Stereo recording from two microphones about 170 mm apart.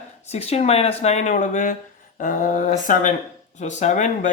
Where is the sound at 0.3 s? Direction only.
40° left (ahead or behind).